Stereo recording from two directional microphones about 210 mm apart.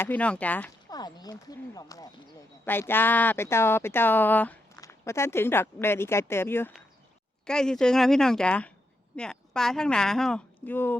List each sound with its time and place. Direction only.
0.0 s speech: 5° left (ahead or behind)
0.9 s speech: 20° left (ahead or behind)